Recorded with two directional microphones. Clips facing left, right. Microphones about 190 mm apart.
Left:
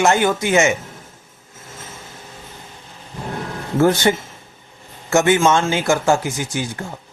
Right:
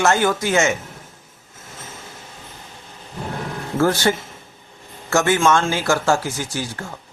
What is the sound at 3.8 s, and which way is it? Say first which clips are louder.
Speech: left 3 dB; 20° left (ahead or behind).